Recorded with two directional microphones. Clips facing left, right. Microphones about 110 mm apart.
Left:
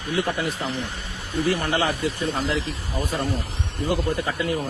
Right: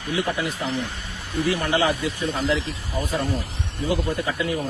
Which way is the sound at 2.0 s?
45° left (ahead or behind).